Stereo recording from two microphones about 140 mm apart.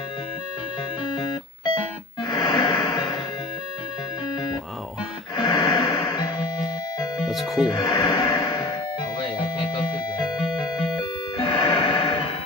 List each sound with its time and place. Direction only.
1.0 s music: 30° left (ahead or behind)
5.3 s music: 30° left (ahead or behind)
7.2 s music: centre (ahead or behind)
7.7 s music: 30° left (ahead or behind)
11.0 s music: 35° left (ahead or behind)